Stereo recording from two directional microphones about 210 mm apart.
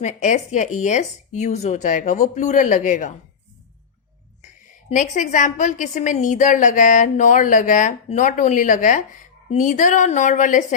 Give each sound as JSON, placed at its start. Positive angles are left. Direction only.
{"t": 0.0, "sound": "a woman's voice", "side_deg": 35}
{"t": 4.4, "sound": "a woman's voice", "side_deg": 35}